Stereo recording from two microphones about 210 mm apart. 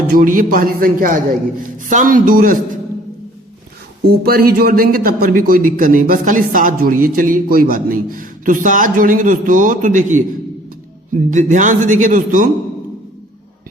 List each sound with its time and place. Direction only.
0.1 s speech: 40° right (ahead or behind)
4.0 s speech: 45° right (ahead or behind)
11.3 s speech: 35° right (ahead or behind)